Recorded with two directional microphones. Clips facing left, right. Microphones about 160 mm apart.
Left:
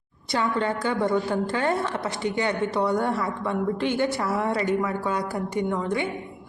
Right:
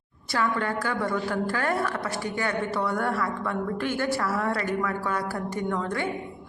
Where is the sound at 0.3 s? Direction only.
20° left (ahead or behind).